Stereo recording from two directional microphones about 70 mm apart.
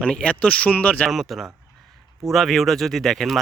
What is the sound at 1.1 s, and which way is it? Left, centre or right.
Speech, centre.